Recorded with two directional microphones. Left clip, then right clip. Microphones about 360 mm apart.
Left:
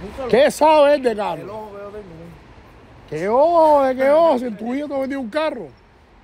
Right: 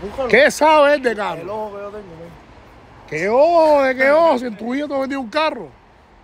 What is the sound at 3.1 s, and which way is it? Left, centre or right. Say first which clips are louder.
Speech: right 2 dB; centre.